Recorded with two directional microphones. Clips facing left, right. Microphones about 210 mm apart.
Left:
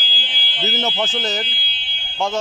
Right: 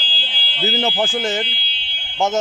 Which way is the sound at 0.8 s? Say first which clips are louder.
Right 3 dB; 30° right (ahead or behind).